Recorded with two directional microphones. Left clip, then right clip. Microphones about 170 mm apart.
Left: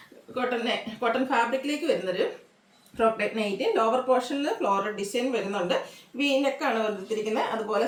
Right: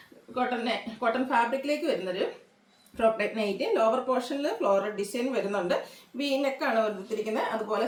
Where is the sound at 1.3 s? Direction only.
15° left (ahead or behind).